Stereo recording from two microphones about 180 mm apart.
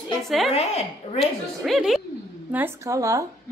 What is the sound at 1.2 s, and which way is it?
Speech, centre (ahead or behind).